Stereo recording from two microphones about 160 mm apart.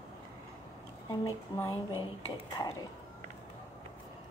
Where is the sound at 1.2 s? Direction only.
20° left (ahead or behind).